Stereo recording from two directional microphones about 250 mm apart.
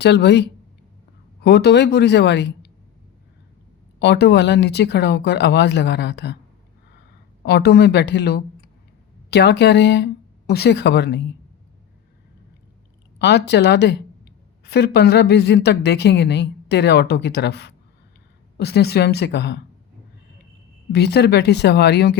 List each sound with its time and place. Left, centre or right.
0.0 s speech: left
1.5 s speech: left
4.0 s speech: left
7.4 s speech: left
13.1 s speech: left
20.9 s speech: left